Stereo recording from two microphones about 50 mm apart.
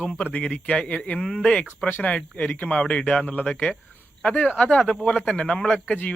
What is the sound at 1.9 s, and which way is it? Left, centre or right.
Speech, left.